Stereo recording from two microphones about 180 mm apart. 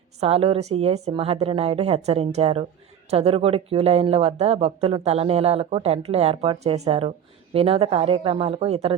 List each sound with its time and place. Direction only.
0.2 s speech: 35° right (ahead or behind)